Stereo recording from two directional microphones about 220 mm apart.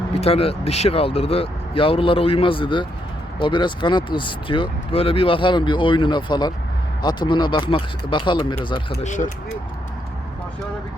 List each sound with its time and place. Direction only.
0.1 s speech: 25° left (ahead or behind)
9.0 s speech: 35° left (ahead or behind)